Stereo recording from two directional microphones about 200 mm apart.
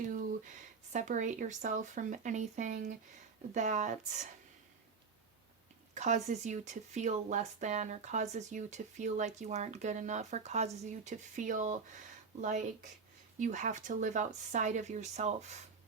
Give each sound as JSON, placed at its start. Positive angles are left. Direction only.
{"t": 0.9, "sound": "speech", "side_deg": -40}
{"t": 5.9, "sound": "speech", "side_deg": -35}